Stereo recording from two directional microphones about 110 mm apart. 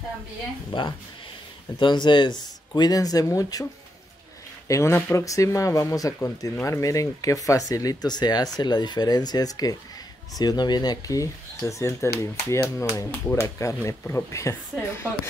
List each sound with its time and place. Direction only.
0.7 s speech: 50° left (ahead or behind); by 3.6 s 30° left (ahead or behind)
4.6 s speech: 25° left (ahead or behind)